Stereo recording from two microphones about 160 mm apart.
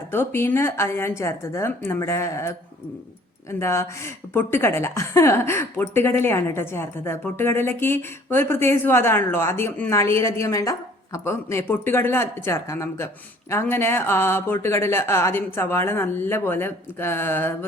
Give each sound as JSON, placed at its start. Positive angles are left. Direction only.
{"t": 0.1, "sound": "a woman's voice", "side_deg": 15}
{"t": 3.6, "sound": "a woman's voice", "side_deg": 15}